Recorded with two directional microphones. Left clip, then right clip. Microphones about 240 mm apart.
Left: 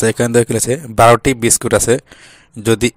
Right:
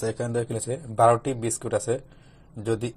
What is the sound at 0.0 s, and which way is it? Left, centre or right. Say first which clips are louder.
Speech: left 14 dB; left.